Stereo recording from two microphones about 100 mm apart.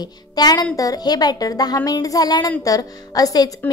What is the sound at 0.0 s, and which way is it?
A woman's voice, 40° left (ahead or behind).